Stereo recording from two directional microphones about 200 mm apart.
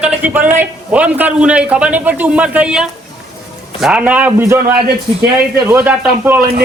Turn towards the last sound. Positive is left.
turn(degrees=-10)  # may be behind; listen again after turning